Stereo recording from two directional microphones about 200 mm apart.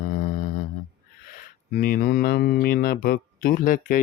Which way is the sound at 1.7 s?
45° left (ahead or behind).